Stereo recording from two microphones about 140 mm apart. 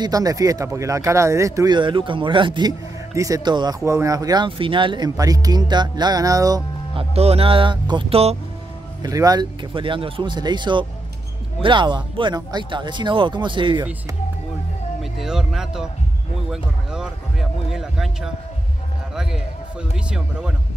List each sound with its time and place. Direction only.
0.0 s speech: 25° right (ahead or behind)
7.0 s speech: 45° right (ahead or behind)
8.1 s speech: 45° right (ahead or behind)
9.0 s speech: 25° right (ahead or behind)
15.0 s speech: 5° right (ahead or behind)
20.1 s speech: 5° right (ahead or behind)